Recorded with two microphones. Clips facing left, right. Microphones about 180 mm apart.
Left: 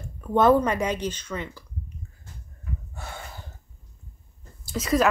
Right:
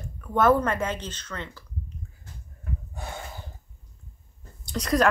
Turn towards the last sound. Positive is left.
turn(degrees=0)  # may be behind; listen again after turning